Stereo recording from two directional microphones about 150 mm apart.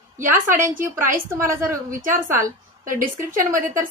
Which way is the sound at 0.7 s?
15° right (ahead or behind).